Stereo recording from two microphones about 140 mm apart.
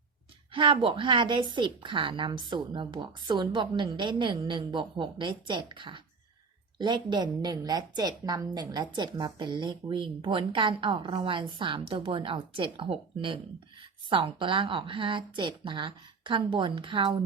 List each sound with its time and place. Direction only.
0.5 s a woman's voice: 35° right (ahead or behind)